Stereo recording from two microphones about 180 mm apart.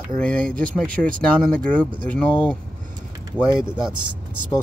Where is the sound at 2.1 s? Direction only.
5° left (ahead or behind).